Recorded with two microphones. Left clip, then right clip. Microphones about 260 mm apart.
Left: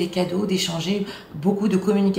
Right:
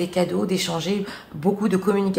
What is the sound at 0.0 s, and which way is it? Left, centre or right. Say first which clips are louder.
Speech: right 1 dB; centre.